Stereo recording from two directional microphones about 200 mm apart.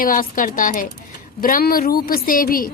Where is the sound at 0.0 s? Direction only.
45° left (ahead or behind).